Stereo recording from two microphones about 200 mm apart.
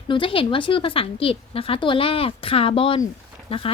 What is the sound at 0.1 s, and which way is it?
A woman's voice, 25° left (ahead or behind).